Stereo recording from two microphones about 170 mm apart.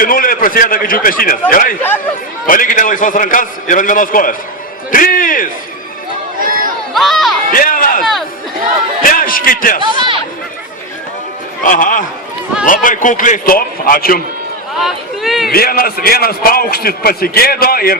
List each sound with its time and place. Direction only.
0.0 s a man's voice: 55° left (ahead or behind)
6.4 s chatter: 55° right (ahead or behind)
6.9 s crowd: centre (ahead or behind)
7.5 s a sound: 55° left (ahead or behind)
9.0 s a man's voice: 55° left (ahead or behind)
9.8 s speech: 25° right (ahead or behind)
11.6 s a man's voice: 55° left (ahead or behind)
14.8 s speech: centre (ahead or behind)
15.5 s a man's voice: 60° left (ahead or behind)